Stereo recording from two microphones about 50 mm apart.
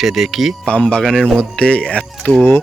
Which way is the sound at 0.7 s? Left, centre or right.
Left.